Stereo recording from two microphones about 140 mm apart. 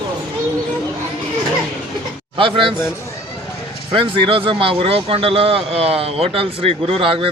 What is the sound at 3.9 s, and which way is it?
A man's voice, 40° right (ahead or behind).